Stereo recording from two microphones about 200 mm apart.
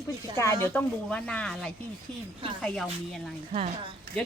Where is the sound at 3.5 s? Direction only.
30° right (ahead or behind).